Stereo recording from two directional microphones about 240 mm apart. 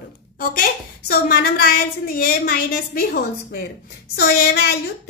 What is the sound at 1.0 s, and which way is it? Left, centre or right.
A woman's voice, left.